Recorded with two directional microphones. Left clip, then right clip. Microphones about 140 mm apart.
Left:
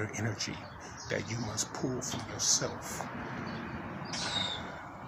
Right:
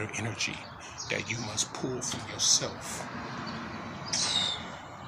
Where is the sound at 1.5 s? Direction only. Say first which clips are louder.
Even; 15° left (ahead or behind).